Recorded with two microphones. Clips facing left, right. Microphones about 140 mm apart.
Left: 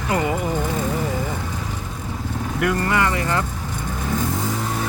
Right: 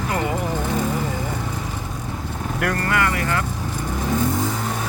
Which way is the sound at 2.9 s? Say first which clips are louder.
Left 1 dB; 25° left (ahead or behind).